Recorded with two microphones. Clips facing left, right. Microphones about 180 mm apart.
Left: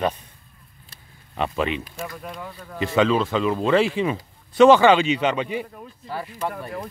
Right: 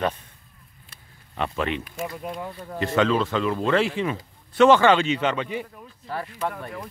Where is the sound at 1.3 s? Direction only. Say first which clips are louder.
Left 2 dB; 15° left (ahead or behind).